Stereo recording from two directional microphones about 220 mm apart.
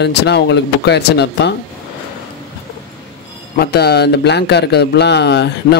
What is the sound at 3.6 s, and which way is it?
Speech, 45° left (ahead or behind).